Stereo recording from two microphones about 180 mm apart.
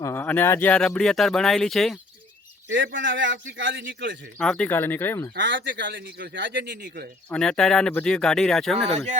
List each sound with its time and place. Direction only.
0.0 s speech: 10° left (ahead or behind)
2.7 s a man's voice: 90° right
4.4 s speech: 5° left (ahead or behind)
5.3 s speech: 85° right
6.8 s speech: 50° right (ahead or behind)
7.3 s speech: 5° left (ahead or behind)
8.7 s speech: 35° right (ahead or behind)